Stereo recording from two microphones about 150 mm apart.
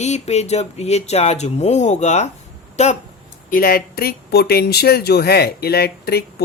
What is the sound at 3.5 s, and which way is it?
Speech, 75° left (ahead or behind).